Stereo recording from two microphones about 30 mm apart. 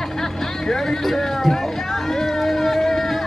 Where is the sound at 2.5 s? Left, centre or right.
Centre.